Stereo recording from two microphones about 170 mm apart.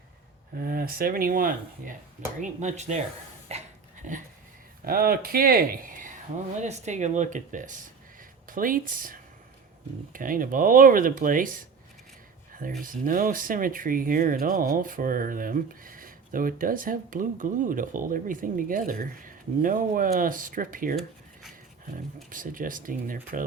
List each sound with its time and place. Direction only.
0.5 s speech: 60° right (ahead or behind); by 3.0 s 40° right (ahead or behind)
3.5 s a sound: 40° right (ahead or behind)
4.0 s speech: 50° right (ahead or behind)
4.9 s speech: 60° right (ahead or behind)
12.8 s speech: 50° right (ahead or behind)
22.3 s speech: 50° right (ahead or behind)